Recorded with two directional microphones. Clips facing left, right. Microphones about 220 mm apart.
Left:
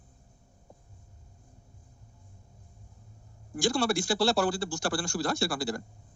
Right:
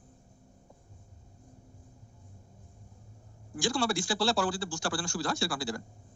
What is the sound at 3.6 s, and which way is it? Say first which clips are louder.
A man's voice: left 3 dB; 40° left (ahead or behind).